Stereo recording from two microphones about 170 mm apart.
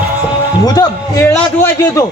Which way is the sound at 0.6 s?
25° left (ahead or behind).